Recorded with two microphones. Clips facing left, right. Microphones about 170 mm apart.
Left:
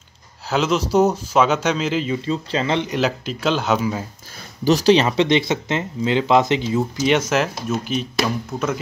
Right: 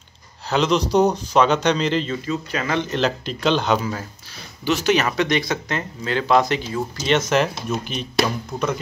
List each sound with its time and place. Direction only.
0.5 s speech: 5° left (ahead or behind)
2.2 s speech: 25° left (ahead or behind)
2.9 s speech: 5° left (ahead or behind)
4.6 s speech: 35° left (ahead or behind)
7.0 s speech: 10° left (ahead or behind)